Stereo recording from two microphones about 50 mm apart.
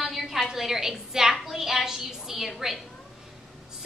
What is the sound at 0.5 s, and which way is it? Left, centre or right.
A woman's voice, centre.